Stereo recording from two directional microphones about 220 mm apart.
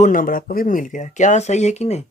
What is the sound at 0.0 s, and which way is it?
Speech, 40° left (ahead or behind).